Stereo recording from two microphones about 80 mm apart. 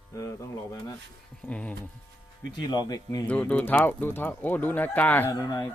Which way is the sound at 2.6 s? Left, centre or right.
Left.